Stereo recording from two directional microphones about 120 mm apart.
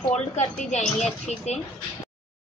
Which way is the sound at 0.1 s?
75° left (ahead or behind).